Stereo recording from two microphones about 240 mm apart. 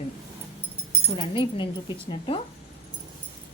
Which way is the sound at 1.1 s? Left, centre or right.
Left.